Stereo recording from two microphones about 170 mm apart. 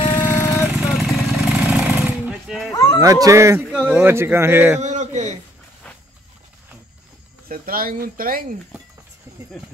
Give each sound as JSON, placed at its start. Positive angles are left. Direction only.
{"t": 0.0, "sound": "vehicle", "side_deg": 25}
{"t": 0.7, "sound": "a sound", "side_deg": 0}
{"t": 2.7, "sound": "bow-wow", "side_deg": 20}
{"t": 3.0, "sound": "a man's voice", "side_deg": -20}
{"t": 4.8, "sound": "a sound", "side_deg": -45}
{"t": 7.4, "sound": "speech", "side_deg": -55}